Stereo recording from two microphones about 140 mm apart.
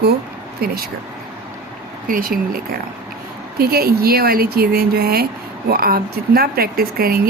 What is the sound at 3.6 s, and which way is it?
Speech, 90° right.